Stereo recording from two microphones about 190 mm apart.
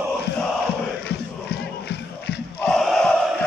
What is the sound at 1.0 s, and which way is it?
Battle cry, 60° left (ahead or behind).